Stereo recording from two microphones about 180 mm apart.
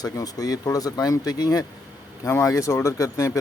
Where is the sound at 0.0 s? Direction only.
20° left (ahead or behind).